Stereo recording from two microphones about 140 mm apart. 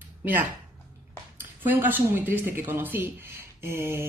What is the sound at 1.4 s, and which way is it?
Speech, 15° right (ahead or behind).